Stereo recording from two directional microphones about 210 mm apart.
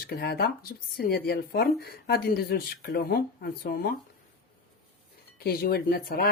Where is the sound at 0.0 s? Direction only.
50° left (ahead or behind).